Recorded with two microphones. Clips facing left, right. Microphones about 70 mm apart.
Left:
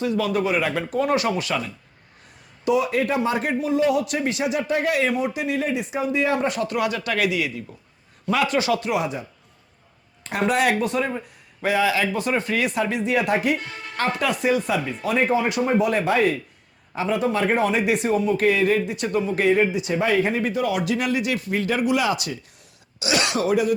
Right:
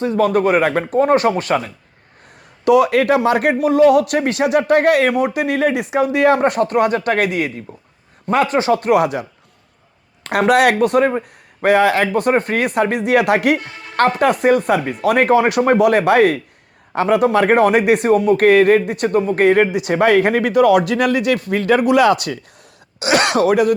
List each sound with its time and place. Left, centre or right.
0.0 s speech: right
2.6 s speech: right
8.8 s speech: right
10.2 s speech: right
14.2 s speech: right